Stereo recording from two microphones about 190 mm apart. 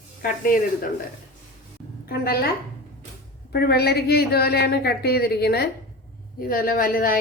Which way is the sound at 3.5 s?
55° left (ahead or behind).